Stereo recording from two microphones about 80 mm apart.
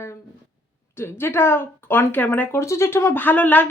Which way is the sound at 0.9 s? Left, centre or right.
Left.